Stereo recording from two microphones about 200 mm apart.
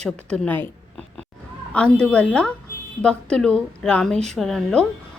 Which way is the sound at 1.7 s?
5° left (ahead or behind).